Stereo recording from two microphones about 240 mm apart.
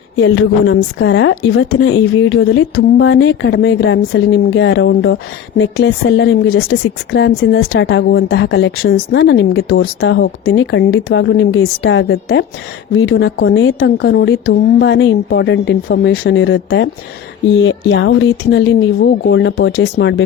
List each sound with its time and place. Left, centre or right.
0.2 s speech: left
0.8 s a woman's voice: left